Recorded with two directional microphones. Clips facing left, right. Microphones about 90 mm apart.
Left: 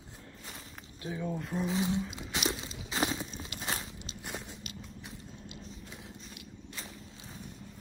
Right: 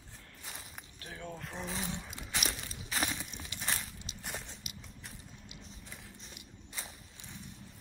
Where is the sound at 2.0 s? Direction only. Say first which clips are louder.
Left 5 dB; 5° left (ahead or behind).